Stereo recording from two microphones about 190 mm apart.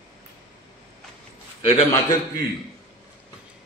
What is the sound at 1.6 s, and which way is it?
Speech, 25° left (ahead or behind).